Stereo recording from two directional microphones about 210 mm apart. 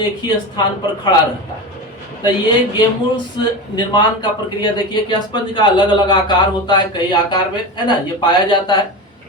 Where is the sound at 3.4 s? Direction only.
20° left (ahead or behind).